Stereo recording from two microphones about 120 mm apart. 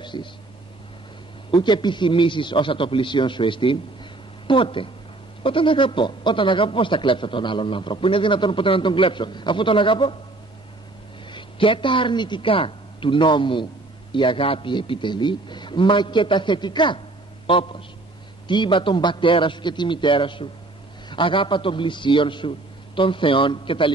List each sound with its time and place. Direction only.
0.0 s a sound: 40° left (ahead or behind)
1.5 s a man's voice: 40° left (ahead or behind)
11.2 s a man's voice: 45° left (ahead or behind)